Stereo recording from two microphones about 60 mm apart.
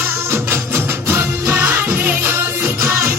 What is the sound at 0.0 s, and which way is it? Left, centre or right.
Music, right.